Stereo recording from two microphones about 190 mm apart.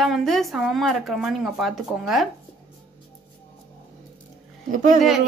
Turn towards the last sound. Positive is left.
turn(degrees=-40)  # may be behind; listen again after turning